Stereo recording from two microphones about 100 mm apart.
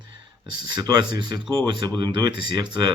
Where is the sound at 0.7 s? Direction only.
45° right (ahead or behind).